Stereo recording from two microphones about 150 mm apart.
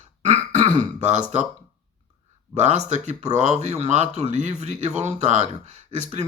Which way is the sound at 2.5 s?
50° right (ahead or behind).